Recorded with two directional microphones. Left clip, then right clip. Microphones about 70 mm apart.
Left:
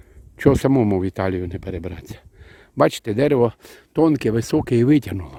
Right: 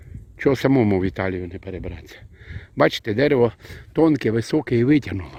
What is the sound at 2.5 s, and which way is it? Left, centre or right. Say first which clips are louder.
Speech: left 1 dB; left.